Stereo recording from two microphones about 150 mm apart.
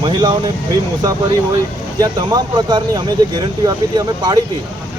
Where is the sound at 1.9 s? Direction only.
25° right (ahead or behind).